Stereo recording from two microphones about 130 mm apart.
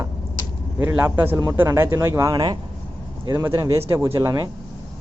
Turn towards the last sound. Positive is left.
turn(degrees=-25)  # may be behind; listen again after turning